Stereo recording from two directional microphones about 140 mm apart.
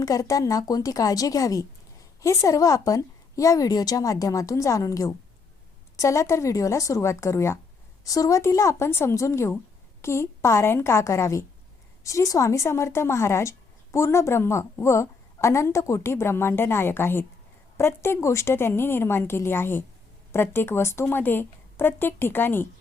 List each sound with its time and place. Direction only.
0.0 s a woman's voice: 25° left (ahead or behind)